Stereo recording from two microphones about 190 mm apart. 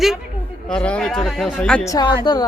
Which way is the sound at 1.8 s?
20° left (ahead or behind).